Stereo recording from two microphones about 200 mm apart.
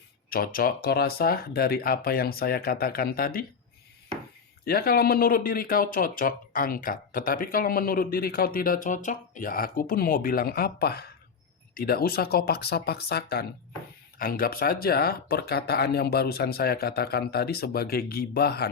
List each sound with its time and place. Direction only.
0.3 s speech: 45° left (ahead or behind)
4.6 s speech: 50° left (ahead or behind)